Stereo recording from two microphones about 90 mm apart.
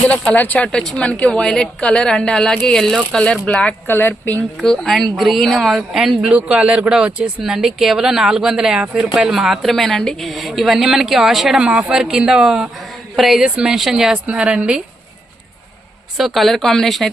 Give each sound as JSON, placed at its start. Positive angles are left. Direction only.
{"t": 0.3, "sound": "a woman's voice", "side_deg": 15}
{"t": 4.6, "sound": "a woman's voice", "side_deg": 5}
{"t": 16.1, "sound": "speech", "side_deg": 0}